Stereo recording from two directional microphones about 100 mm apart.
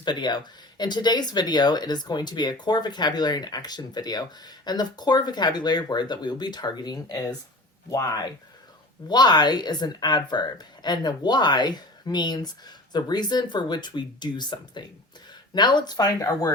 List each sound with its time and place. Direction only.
0.0 s speech: 45° left (ahead or behind)
9.0 s speech: 45° left (ahead or behind)